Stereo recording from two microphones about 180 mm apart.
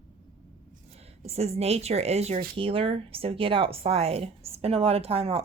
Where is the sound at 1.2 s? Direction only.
35° right (ahead or behind).